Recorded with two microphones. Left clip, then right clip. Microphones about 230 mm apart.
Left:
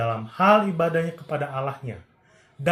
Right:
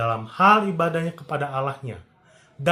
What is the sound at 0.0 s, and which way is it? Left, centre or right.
Speech, centre.